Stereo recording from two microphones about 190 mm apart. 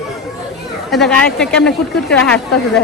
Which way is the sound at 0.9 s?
Centre (ahead or behind).